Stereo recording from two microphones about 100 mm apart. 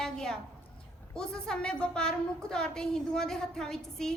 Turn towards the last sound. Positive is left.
turn(degrees=5)  # may be behind; listen again after turning